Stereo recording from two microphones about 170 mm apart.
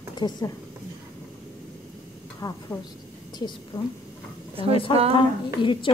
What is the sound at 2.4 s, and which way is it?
Speech, 20° left (ahead or behind).